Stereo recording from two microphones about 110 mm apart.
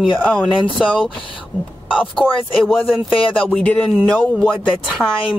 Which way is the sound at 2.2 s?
10° right (ahead or behind).